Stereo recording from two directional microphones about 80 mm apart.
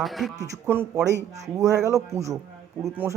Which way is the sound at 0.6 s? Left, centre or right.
Right.